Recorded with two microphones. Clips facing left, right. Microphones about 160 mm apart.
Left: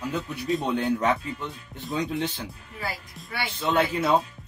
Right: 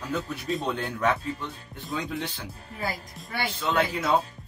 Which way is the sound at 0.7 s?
20° left (ahead or behind).